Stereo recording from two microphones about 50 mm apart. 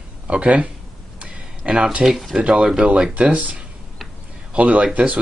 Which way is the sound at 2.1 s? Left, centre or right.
Centre.